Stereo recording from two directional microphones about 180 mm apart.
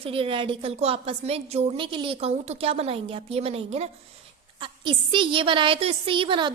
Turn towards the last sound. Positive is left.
turn(degrees=-25)  # may be behind; listen again after turning